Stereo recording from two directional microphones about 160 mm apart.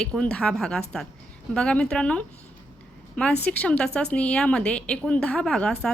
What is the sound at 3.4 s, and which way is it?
A woman's voice, 10° left (ahead or behind).